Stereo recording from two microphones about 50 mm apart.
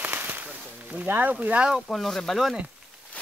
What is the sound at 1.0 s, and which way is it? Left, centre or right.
Speech, right.